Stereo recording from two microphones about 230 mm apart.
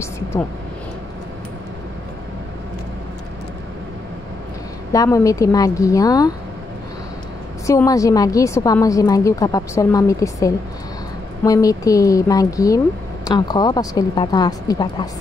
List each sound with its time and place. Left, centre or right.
4.9 s speech: centre
7.6 s speech: centre